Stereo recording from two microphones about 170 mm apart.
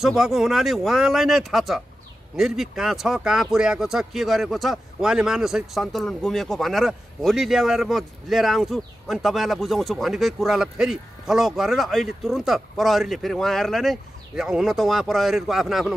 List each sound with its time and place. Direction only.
0.0 s speech: centre (ahead or behind)